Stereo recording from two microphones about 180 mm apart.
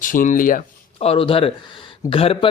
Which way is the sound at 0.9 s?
30° left (ahead or behind).